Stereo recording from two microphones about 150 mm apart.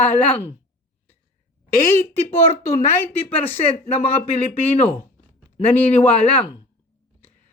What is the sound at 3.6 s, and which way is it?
Speech, 40° left (ahead or behind).